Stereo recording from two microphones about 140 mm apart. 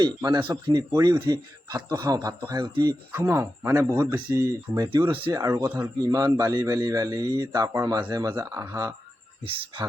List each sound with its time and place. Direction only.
0.0 s a man's voice: 30° right (ahead or behind)
3.1 s a man's voice: 15° right (ahead or behind)
9.5 s speech: 40° right (ahead or behind)